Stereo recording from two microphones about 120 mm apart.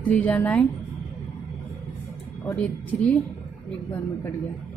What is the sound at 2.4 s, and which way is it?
Speech, 10° left (ahead or behind).